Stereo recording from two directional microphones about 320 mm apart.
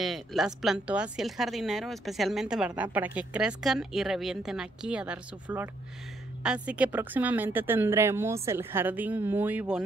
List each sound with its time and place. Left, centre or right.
0.0 s speech: centre